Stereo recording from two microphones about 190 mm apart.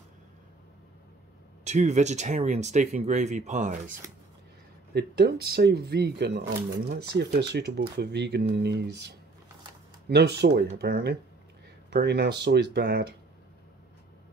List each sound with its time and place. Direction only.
1.6 s speech: 40° right (ahead or behind)
4.9 s speech: 55° right (ahead or behind)